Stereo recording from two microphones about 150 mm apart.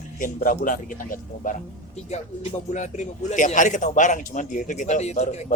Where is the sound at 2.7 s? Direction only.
55° left (ahead or behind).